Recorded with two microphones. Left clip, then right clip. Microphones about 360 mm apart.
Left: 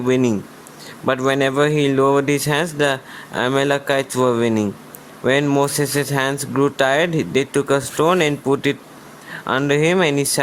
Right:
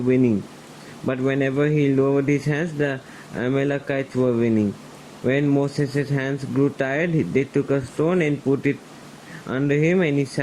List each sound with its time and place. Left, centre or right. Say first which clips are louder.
0.1 s speech: left 2 dB; left